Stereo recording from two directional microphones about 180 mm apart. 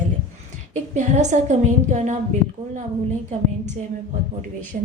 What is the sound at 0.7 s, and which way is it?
A woman's voice, 40° right (ahead or behind).